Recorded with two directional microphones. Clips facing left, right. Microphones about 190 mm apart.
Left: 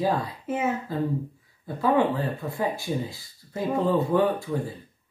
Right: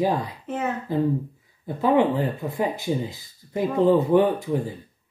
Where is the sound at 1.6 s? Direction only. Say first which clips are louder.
Right 3 dB; 20° right (ahead or behind).